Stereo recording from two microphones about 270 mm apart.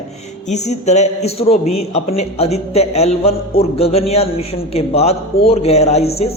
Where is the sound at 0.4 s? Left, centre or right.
Left.